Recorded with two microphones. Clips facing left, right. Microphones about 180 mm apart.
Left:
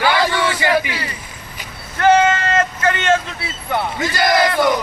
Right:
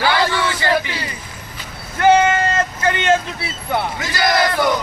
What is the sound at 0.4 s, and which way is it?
Crowd, 15° left (ahead or behind).